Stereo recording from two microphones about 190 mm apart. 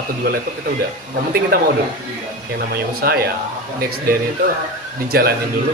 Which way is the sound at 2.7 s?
55° right (ahead or behind).